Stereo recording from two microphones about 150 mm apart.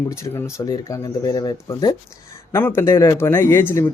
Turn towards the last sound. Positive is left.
turn(degrees=15)  # may be behind; listen again after turning